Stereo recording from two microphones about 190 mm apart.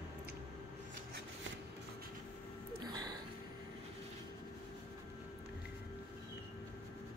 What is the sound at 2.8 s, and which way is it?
Music, 20° right (ahead or behind).